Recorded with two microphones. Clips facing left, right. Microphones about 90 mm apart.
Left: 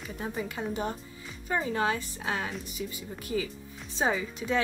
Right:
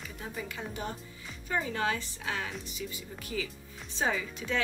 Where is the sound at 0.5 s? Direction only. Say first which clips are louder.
Left 5 dB; 30° left (ahead or behind).